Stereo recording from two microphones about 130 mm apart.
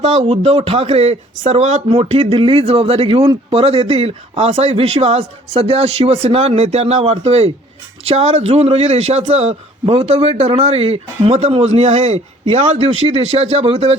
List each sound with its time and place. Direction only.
0.0 s speech: 55° right (ahead or behind)